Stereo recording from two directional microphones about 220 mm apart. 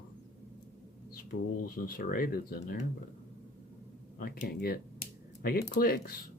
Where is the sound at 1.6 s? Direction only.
40° left (ahead or behind).